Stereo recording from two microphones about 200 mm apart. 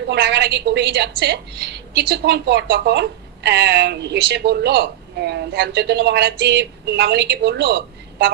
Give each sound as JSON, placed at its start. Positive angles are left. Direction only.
{"t": 0.1, "sound": "a woman's voice", "side_deg": -60}